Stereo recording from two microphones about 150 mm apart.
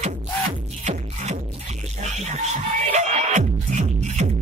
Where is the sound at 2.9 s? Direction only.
50° right (ahead or behind).